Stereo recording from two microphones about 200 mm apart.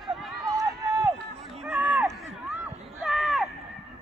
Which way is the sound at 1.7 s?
10° right (ahead or behind).